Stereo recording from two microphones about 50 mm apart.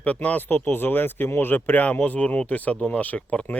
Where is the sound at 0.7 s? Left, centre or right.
Left.